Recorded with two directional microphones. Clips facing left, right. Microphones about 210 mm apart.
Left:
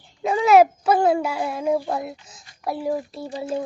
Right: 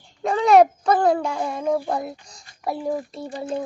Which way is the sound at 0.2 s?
5° left (ahead or behind).